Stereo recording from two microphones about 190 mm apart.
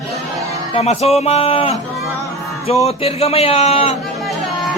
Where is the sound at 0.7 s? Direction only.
35° left (ahead or behind).